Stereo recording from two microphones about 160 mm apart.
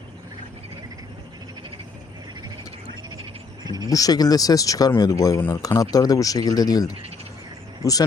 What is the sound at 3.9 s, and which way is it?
Speech, 20° left (ahead or behind).